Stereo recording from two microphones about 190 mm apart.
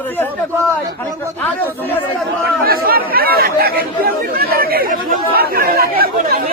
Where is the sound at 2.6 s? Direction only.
50° right (ahead or behind).